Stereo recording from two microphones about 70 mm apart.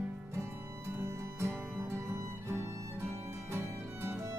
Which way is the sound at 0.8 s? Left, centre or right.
Right.